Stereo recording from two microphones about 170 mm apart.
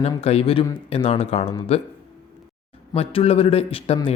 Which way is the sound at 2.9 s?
35° left (ahead or behind).